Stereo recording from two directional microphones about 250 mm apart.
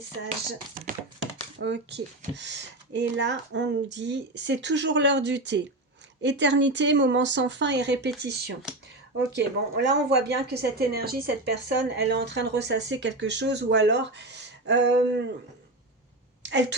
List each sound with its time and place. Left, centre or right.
1.5 s a woman's voice: right
16.4 s a woman's voice: right